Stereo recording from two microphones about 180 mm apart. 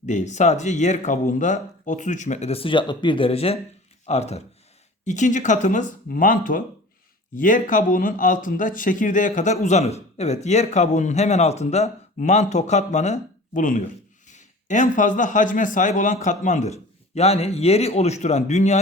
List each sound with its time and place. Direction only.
0.0 s speech: 40° left (ahead or behind)